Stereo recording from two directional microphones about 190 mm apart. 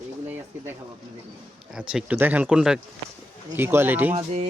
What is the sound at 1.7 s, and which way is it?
Speech, 5° right (ahead or behind).